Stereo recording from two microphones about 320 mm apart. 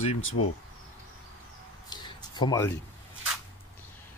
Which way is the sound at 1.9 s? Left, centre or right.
Centre.